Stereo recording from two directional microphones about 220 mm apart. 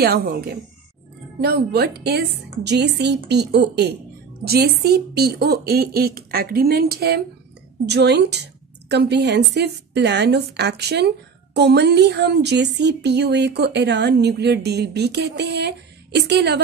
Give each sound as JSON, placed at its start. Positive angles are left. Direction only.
{"t": 0.0, "sound": "a woman's voice", "side_deg": -45}